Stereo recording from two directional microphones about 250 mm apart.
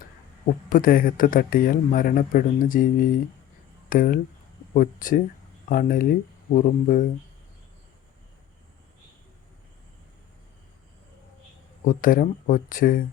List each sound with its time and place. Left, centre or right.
0.7 s a man's voice: left
11.9 s a man's voice: left